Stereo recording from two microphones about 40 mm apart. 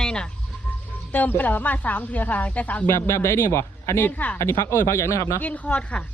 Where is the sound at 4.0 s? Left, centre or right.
Left.